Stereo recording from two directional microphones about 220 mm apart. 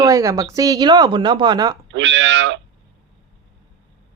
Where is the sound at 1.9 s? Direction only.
55° right (ahead or behind).